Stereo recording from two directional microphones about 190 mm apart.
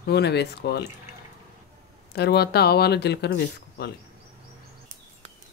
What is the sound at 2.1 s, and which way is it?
Speech, 60° left (ahead or behind).